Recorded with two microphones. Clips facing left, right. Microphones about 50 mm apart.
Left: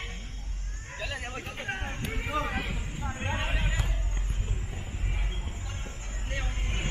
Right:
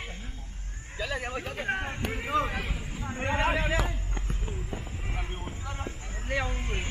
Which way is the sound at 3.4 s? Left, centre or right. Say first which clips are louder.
Right 7 dB; right.